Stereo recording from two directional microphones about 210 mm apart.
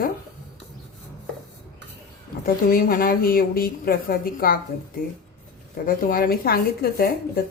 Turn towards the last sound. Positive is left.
turn(degrees=45)  # may be behind; listen again after turning